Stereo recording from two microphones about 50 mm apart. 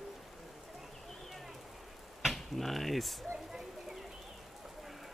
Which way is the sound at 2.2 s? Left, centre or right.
Centre.